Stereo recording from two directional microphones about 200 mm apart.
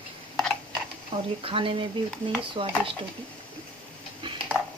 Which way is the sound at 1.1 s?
25° right (ahead or behind).